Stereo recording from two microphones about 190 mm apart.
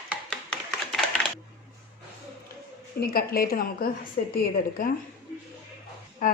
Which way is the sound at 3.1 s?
50° left (ahead or behind).